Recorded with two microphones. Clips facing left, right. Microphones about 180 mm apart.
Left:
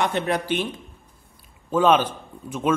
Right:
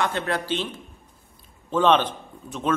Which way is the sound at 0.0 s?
15° left (ahead or behind).